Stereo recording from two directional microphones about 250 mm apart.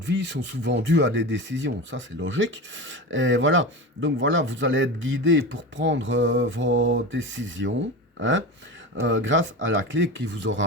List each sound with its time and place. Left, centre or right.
0.0 s speech: right